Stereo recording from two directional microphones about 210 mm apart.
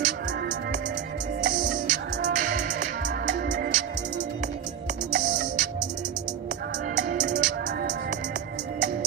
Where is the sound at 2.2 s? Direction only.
40° right (ahead or behind).